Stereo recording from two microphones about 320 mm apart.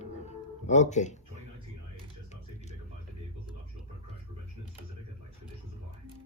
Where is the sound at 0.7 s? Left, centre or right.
Left.